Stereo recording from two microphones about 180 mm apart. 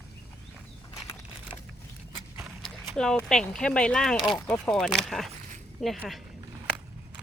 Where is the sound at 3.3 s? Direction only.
5° left (ahead or behind).